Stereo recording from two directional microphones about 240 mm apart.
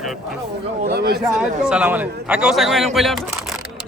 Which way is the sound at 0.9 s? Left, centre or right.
Right.